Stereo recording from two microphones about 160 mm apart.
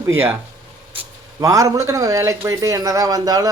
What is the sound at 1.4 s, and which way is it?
Speech, 20° right (ahead or behind).